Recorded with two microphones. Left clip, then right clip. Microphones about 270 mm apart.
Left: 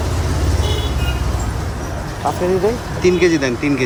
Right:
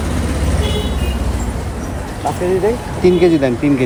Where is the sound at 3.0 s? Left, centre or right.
Centre.